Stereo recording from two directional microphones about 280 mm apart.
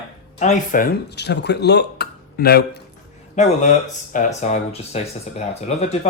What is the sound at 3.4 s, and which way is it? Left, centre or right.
Speech, left.